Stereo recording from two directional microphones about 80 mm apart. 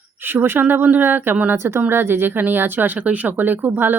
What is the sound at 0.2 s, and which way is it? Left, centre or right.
Speech, right.